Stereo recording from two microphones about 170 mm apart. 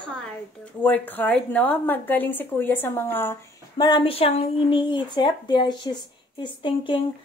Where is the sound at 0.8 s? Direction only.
10° left (ahead or behind).